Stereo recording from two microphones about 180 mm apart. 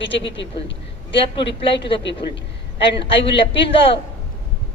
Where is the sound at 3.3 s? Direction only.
30° left (ahead or behind).